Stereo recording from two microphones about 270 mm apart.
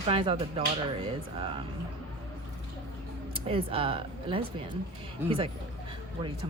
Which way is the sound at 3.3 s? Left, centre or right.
Centre.